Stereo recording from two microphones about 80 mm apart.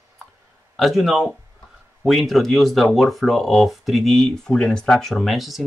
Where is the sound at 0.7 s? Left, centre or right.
Centre.